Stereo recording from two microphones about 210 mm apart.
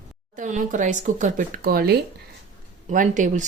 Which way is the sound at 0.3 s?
35° right (ahead or behind).